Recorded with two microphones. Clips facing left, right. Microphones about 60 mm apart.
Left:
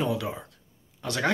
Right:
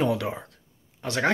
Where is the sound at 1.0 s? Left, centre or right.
Right.